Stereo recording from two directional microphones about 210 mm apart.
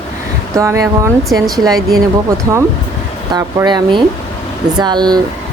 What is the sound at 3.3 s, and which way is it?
A woman's voice, 20° right (ahead or behind).